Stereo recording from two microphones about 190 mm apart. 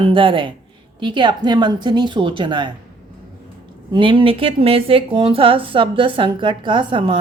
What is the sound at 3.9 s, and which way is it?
Speech, 25° right (ahead or behind).